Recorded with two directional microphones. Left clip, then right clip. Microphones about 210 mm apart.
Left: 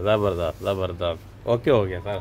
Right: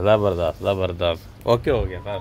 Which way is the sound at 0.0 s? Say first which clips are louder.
Right 4 dB; 5° right (ahead or behind).